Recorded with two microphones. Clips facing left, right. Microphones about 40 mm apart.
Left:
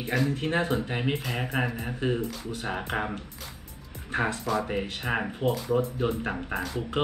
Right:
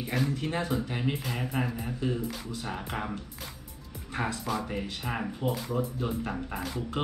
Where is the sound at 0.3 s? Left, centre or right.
Left.